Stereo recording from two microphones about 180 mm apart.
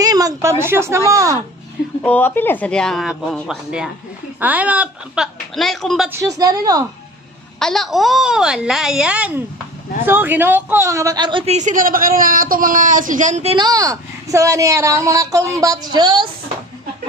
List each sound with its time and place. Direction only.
0.0 s a woman's voice: 20° right (ahead or behind)
2.0 s speech: 10° left (ahead or behind)
6.0 s a woman's voice: 15° right (ahead or behind)
7.5 s a woman's voice: centre (ahead or behind); by 11.5 s 25° right (ahead or behind)
11.5 s speech: 45° right (ahead or behind)
13.6 s a woman's voice: 20° right (ahead or behind)